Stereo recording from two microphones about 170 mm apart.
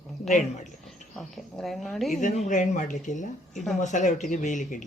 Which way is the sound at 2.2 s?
45° left (ahead or behind).